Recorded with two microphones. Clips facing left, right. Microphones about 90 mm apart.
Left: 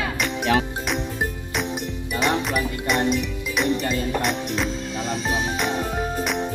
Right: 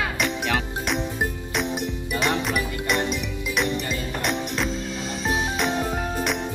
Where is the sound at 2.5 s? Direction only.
Centre (ahead or behind).